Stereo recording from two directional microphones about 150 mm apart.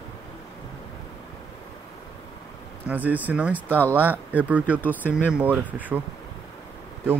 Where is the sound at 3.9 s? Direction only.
10° right (ahead or behind).